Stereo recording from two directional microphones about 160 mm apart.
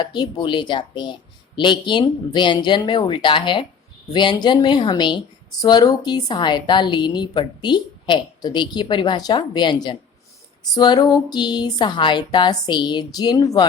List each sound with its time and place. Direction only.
0.0 s a woman's voice: 25° left (ahead or behind)